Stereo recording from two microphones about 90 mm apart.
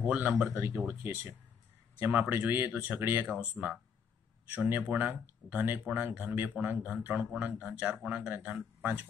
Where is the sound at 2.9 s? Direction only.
20° right (ahead or behind).